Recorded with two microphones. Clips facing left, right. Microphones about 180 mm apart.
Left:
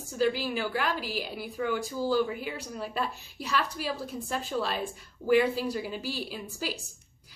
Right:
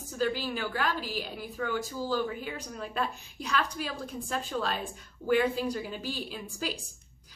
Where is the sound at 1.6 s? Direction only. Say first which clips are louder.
Left 3 dB; 45° right (ahead or behind).